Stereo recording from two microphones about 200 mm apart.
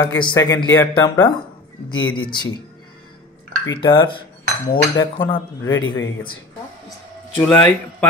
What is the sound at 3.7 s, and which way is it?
Speech, 25° left (ahead or behind).